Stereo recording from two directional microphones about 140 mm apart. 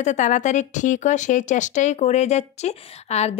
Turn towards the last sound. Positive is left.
turn(degrees=50)  # may be behind; listen again after turning